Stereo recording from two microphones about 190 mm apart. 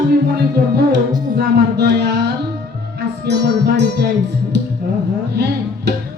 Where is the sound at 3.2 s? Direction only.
60° right (ahead or behind).